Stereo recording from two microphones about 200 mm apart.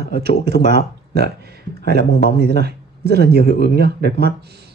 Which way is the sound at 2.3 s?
55° right (ahead or behind).